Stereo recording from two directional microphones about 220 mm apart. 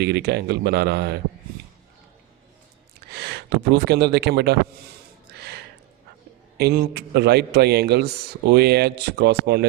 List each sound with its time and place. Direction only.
0.0 s a man's voice: 50° right (ahead or behind)
3.1 s speech: 45° right (ahead or behind)
5.3 s gasp: 45° right (ahead or behind)
6.6 s a man's voice: 50° right (ahead or behind)